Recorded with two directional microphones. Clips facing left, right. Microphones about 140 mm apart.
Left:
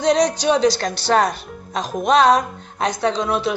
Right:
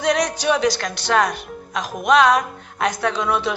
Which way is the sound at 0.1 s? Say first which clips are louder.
Left 3 dB; 25° left (ahead or behind).